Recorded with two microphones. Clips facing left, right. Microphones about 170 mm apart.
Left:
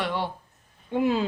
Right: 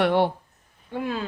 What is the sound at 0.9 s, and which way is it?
Speech, 20° left (ahead or behind).